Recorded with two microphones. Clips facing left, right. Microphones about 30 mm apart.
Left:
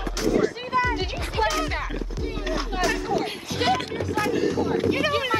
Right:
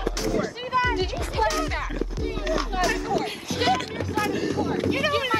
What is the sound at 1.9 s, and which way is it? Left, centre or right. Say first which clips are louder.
Music: right 2 dB; left.